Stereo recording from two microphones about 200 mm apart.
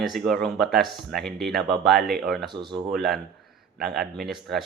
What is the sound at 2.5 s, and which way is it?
Speech, 25° right (ahead or behind).